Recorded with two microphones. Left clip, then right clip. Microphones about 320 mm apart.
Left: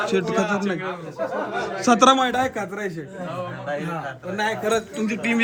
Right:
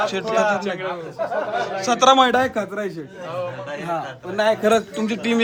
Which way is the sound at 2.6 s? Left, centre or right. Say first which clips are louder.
Right 3 dB; centre.